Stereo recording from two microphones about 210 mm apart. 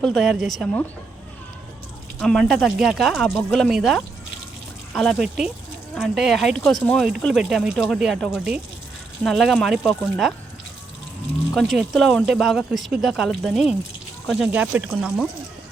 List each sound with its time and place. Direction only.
0.0 s speech: centre (ahead or behind)
2.1 s speech: centre (ahead or behind)
11.5 s speech: centre (ahead or behind)